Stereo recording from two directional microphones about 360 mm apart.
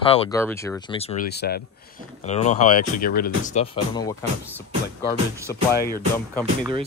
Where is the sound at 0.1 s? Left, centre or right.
Centre.